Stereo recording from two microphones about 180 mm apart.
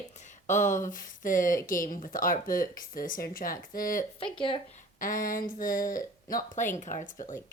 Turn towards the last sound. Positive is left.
turn(degrees=45)  # may be behind; listen again after turning